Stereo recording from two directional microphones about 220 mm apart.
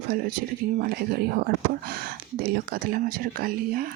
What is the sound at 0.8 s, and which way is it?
Speech, 40° right (ahead or behind).